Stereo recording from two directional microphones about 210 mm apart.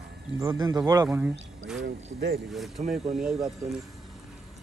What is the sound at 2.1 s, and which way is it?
Speech, 50° right (ahead or behind).